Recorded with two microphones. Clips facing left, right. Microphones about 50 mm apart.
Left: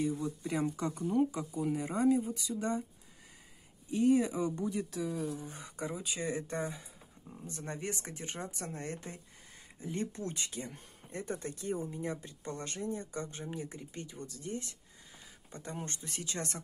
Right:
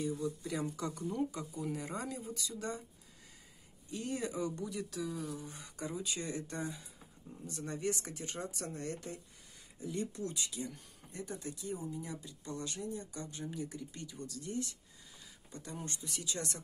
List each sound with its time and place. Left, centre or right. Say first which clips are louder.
0.0 s speech: left 3 dB; left
3.9 s speech: left 10 dB; left